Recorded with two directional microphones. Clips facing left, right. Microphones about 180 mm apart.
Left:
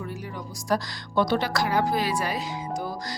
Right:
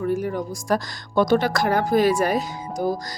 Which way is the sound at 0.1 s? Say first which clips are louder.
Right 12 dB; 50° right (ahead or behind).